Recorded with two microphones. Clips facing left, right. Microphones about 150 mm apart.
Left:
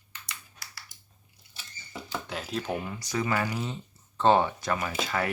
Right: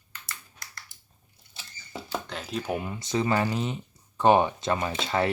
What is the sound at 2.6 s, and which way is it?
Speech, 15° right (ahead or behind).